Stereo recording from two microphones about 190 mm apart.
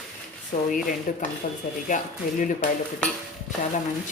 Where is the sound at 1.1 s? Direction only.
45° left (ahead or behind).